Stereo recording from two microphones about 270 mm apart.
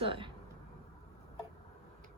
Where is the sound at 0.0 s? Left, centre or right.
Centre.